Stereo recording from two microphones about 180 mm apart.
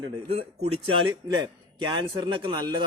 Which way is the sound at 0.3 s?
35° right (ahead or behind).